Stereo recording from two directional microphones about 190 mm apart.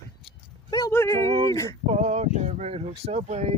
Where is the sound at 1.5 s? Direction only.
15° left (ahead or behind).